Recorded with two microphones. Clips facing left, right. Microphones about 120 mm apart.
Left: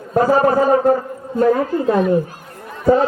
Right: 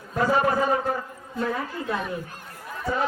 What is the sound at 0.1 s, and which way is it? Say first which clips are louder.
A man's voice: left 8 dB; 40° left (ahead or behind).